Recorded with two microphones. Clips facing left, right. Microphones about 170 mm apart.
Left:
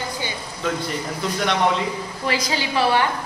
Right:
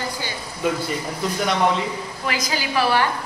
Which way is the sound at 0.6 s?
10° right (ahead or behind).